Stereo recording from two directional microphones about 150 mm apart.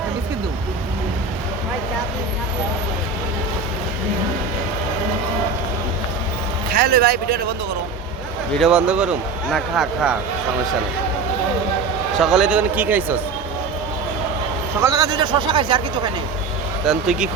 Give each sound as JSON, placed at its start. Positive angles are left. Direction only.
{"t": 6.7, "sound": "speech", "side_deg": -85}
{"t": 8.5, "sound": "a man's voice", "side_deg": -5}
{"t": 12.2, "sound": "a man's voice", "side_deg": -5}
{"t": 14.8, "sound": "speech", "side_deg": -25}
{"t": 16.8, "sound": "speech", "side_deg": -5}